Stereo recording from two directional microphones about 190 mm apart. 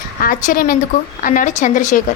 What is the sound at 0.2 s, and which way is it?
A woman's voice, 50° left (ahead or behind).